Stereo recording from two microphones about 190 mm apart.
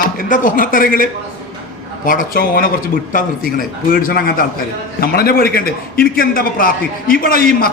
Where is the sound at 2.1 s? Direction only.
45° left (ahead or behind).